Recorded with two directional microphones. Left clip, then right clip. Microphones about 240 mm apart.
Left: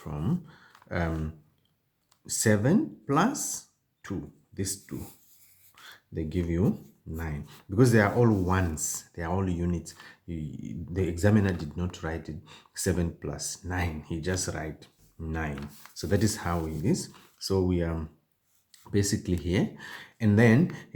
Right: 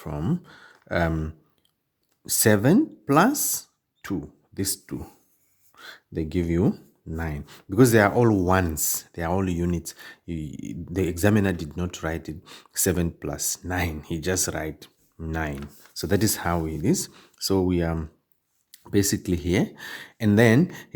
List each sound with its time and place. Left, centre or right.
0.0 s speech: right